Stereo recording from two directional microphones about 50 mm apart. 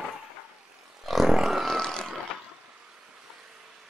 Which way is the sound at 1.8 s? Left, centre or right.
Centre.